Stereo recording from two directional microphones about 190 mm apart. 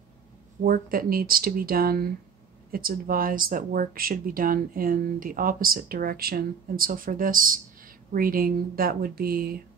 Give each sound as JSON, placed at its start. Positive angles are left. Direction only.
{"t": 0.7, "sound": "speech", "side_deg": -50}